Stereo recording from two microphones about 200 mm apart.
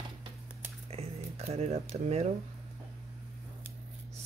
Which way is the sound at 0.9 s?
30° right (ahead or behind).